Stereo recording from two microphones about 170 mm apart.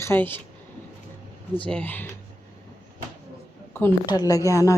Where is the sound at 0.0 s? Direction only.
10° left (ahead or behind).